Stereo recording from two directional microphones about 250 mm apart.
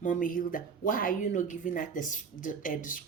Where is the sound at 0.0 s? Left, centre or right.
Left.